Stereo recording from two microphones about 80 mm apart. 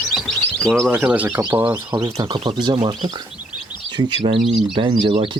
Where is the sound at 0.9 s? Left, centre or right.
Centre.